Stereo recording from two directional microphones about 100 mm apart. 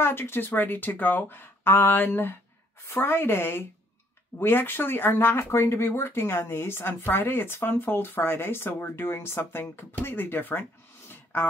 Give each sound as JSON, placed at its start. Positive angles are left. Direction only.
{"t": 0.0, "sound": "speech", "side_deg": 20}